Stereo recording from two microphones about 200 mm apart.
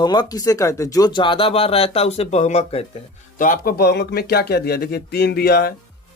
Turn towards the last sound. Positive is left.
turn(degrees=50)  # may be behind; listen again after turning